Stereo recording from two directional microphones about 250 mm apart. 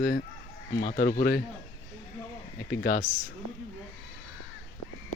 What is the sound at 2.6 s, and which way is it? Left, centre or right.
Speech, left.